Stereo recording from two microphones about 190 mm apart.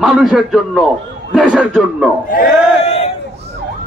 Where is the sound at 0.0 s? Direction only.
Centre (ahead or behind).